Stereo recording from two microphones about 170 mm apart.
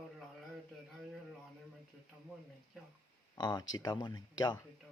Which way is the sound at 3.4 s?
25° left (ahead or behind).